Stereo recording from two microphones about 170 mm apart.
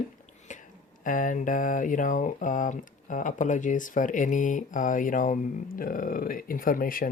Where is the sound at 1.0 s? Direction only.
50° left (ahead or behind).